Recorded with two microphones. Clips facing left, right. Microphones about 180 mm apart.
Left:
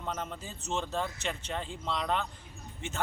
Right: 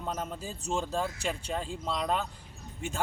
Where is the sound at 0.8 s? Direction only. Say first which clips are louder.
Right 1 dB; 10° right (ahead or behind).